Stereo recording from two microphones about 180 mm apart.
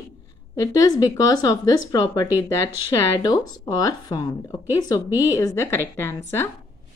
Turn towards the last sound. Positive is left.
turn(degrees=15)  # may be behind; listen again after turning